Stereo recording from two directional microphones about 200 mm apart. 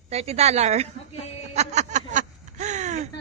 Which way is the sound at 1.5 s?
35° right (ahead or behind).